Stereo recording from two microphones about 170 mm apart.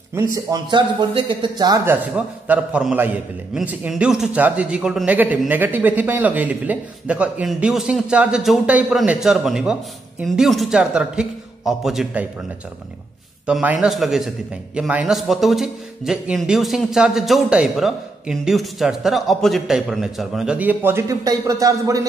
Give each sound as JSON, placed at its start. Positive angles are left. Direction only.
{"t": 0.1, "sound": "a man's voice", "side_deg": -20}
{"t": 1.9, "sound": "a man's voice", "side_deg": -10}
{"t": 13.5, "sound": "speech", "side_deg": -5}